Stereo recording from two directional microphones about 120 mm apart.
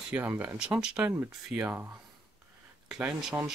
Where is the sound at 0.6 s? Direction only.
5° right (ahead or behind).